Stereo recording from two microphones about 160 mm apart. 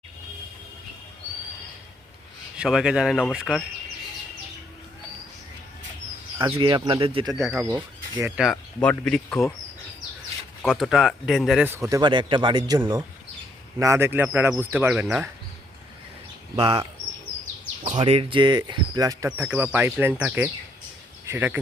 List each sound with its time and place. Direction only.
2.6 s speech: 5° right (ahead or behind)
6.4 s speech: 30° right (ahead or behind)
7.3 s speech: centre (ahead or behind)
7.6 s speech: 25° right (ahead or behind)
8.8 s speech: 5° left (ahead or behind)
10.6 s speech: centre (ahead or behind)
11.6 s speech: 15° right (ahead or behind)
17.9 s speech: 35° right (ahead or behind); by 19.5 s 20° right (ahead or behind)
19.5 s speech: 10° right (ahead or behind)